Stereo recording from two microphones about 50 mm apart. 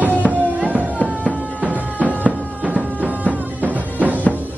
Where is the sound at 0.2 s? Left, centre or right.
Centre.